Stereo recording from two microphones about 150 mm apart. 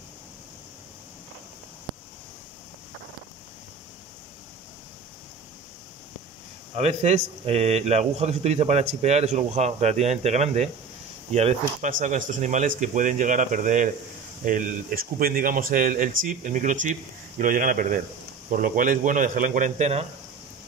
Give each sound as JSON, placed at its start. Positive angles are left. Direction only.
{"t": 6.7, "sound": "speech", "side_deg": -45}